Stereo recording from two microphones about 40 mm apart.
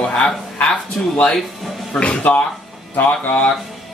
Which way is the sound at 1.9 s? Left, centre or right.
Left.